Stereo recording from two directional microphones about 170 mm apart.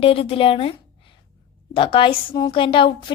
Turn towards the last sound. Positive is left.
turn(degrees=30)  # may be behind; listen again after turning